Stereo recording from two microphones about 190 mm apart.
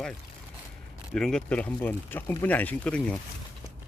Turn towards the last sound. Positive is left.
turn(degrees=5)  # may be behind; listen again after turning